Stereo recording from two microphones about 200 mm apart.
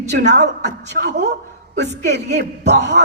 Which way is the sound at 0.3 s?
60° right (ahead or behind).